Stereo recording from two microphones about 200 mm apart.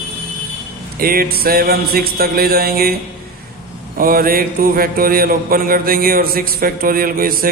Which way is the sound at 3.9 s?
45° right (ahead or behind).